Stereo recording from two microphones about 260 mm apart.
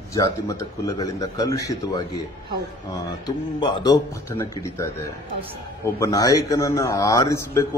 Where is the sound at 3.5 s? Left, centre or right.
Centre.